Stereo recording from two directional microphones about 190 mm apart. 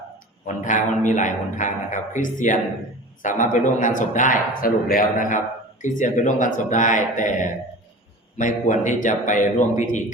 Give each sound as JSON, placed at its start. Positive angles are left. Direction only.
{"t": 0.4, "sound": "a man's voice", "side_deg": 40}